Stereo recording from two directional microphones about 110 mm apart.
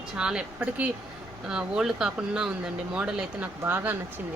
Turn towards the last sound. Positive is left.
turn(degrees=-20)  # may be behind; listen again after turning